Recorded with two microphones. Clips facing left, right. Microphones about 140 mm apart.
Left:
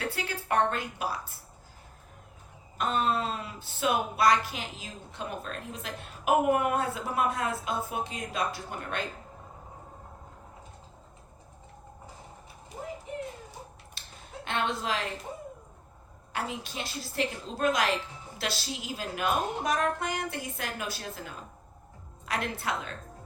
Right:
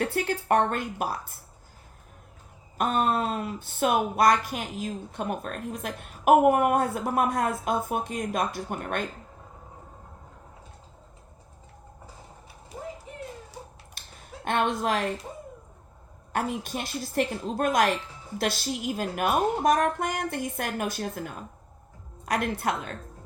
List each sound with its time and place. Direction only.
0.0 s speech: 50° right (ahead or behind)
2.7 s speech: 50° right (ahead or behind)
14.0 s a sound: 50° right (ahead or behind)
14.4 s speech: 50° right (ahead or behind)
16.3 s speech: 50° right (ahead or behind)